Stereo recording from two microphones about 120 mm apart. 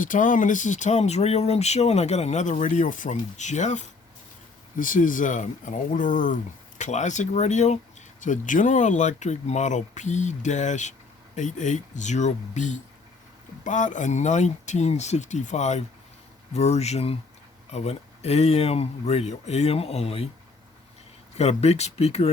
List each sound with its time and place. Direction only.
0.1 s speech: 90° left; by 7.8 s 75° left (ahead or behind)
8.2 s speech: 90° left
16.5 s speech: 65° left (ahead or behind)
21.3 s speech: 60° left (ahead or behind)